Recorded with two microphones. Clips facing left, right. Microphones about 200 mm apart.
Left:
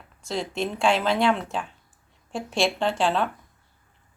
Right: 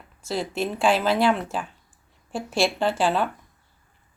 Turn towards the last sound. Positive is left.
turn(degrees=-5)  # may be behind; listen again after turning